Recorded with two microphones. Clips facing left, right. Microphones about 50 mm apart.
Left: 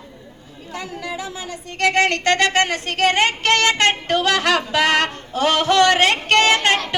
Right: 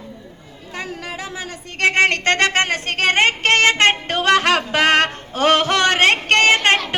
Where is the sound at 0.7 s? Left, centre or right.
Right.